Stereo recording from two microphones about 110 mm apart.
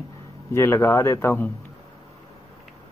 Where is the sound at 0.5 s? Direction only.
25° left (ahead or behind).